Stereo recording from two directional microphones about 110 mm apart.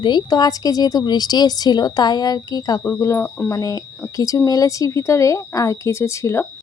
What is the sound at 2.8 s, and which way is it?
Speech, 20° left (ahead or behind).